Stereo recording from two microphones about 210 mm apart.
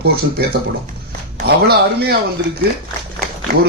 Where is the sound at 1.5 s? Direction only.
50° right (ahead or behind).